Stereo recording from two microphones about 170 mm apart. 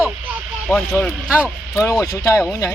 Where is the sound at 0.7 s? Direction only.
5° left (ahead or behind).